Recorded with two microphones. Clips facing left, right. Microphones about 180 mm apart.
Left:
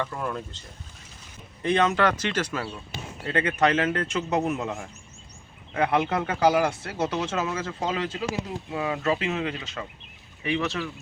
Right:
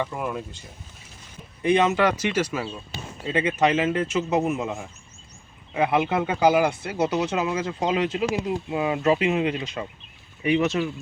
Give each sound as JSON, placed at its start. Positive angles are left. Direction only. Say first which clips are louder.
{"t": 0.0, "sound": "speech", "louder": "right 2 dB", "side_deg": -10}
{"t": 1.6, "sound": "speech", "louder": "right 2 dB", "side_deg": -10}